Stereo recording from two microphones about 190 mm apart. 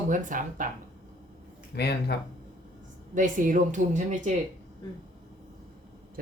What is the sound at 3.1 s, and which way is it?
Speech, 45° right (ahead or behind).